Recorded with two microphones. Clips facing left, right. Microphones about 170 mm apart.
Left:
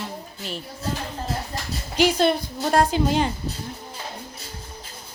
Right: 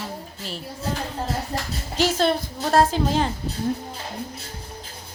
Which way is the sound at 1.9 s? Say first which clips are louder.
Left 2 dB; centre (ahead or behind).